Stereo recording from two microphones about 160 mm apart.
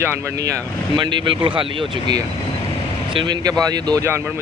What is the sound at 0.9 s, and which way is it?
Speech, 30° right (ahead or behind).